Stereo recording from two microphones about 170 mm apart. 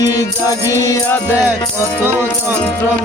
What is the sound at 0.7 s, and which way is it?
Music, 20° left (ahead or behind).